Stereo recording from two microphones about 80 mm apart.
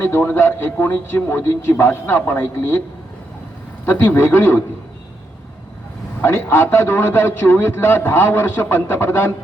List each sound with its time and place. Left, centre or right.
0.0 s a man's voice: left
3.8 s a man's voice: left
6.2 s a man's voice: left